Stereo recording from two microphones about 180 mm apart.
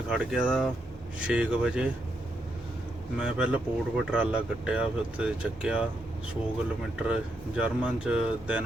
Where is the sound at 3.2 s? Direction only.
5° right (ahead or behind).